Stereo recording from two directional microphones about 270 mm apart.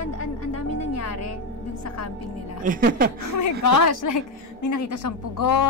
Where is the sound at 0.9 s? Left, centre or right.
Left.